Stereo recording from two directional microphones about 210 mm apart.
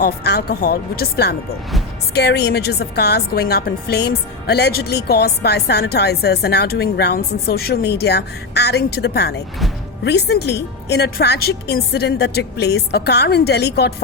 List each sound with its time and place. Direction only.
0.0 s a woman's voice: 50° left (ahead or behind)